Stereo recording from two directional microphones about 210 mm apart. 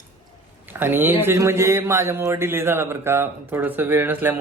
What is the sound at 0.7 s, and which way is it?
A man's voice, 10° right (ahead or behind).